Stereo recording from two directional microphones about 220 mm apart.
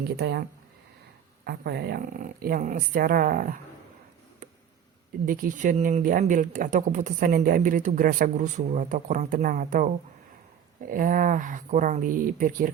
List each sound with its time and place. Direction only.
0.2 s speech: 45° right (ahead or behind)
1.5 s speech: 45° right (ahead or behind)
5.2 s speech: 40° right (ahead or behind)